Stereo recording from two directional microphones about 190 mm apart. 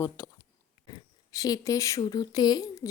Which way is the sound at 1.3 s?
20° left (ahead or behind).